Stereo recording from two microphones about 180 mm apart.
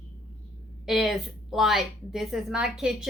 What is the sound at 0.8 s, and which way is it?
A woman's voice, centre (ahead or behind).